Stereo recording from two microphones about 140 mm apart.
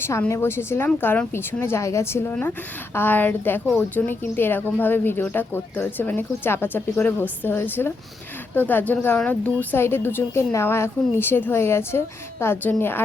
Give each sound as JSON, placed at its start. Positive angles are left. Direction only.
{"t": 0.0, "sound": "speech", "side_deg": 20}